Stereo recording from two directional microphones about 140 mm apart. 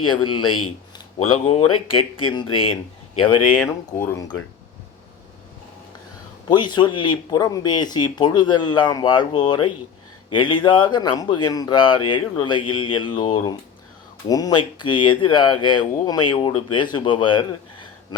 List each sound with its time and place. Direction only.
0.0 s speech: 35° left (ahead or behind)
4.0 s speech: 20° left (ahead or behind)
6.5 s speech: 30° left (ahead or behind)